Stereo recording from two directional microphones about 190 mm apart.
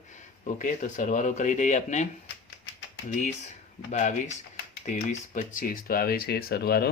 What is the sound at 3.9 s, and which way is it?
A man's voice, 40° left (ahead or behind).